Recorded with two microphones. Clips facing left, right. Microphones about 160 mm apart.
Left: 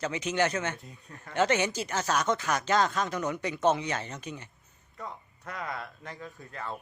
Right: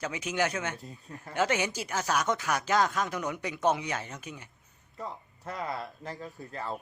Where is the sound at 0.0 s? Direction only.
10° right (ahead or behind).